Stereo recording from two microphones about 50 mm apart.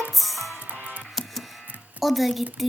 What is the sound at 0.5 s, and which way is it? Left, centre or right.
Music, right.